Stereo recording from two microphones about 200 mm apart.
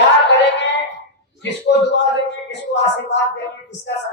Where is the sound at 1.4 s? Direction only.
60° left (ahead or behind).